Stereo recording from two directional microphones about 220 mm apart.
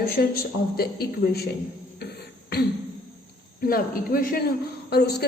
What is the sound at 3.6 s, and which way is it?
A woman's voice, 40° left (ahead or behind).